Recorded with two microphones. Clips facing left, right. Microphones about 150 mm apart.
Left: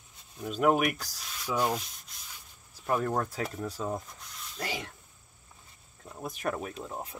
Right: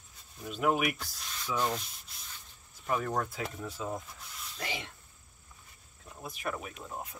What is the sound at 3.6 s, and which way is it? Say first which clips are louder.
Speech: left 3 dB; 40° left (ahead or behind).